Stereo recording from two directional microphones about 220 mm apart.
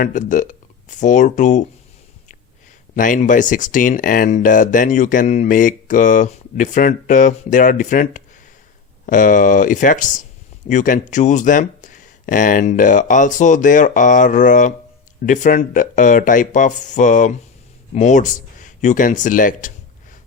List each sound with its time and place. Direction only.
0.0 s speech: 35° left (ahead or behind)
2.9 s speech: 35° left (ahead or behind)